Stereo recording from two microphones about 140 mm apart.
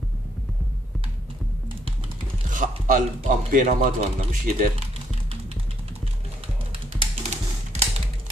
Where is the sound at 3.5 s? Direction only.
70° right (ahead or behind).